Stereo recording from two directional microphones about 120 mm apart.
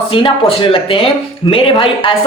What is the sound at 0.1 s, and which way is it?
Speech, 45° left (ahead or behind).